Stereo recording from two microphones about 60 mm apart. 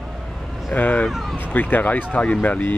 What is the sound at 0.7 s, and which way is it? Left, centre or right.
Speech, left.